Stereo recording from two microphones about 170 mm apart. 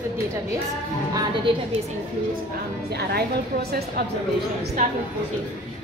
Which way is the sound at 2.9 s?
70° right (ahead or behind).